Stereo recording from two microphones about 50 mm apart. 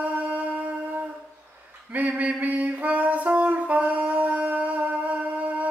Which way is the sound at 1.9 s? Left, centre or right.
Right.